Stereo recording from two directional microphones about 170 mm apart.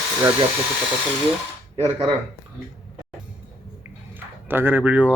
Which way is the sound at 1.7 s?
35° right (ahead or behind).